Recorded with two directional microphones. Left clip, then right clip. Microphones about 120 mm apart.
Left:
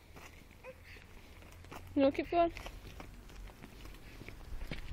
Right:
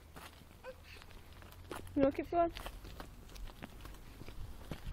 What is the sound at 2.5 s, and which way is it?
Walk, 5° right (ahead or behind).